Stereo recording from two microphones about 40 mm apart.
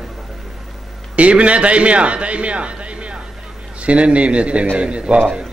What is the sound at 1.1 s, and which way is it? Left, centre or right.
A man's voice, right.